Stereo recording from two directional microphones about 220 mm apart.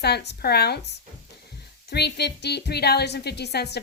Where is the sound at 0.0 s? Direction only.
50° left (ahead or behind).